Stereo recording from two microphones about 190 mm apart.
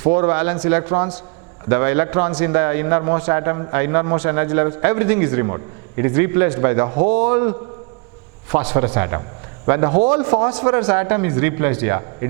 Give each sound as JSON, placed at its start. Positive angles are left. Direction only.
{"t": 0.0, "sound": "a man's voice", "side_deg": -15}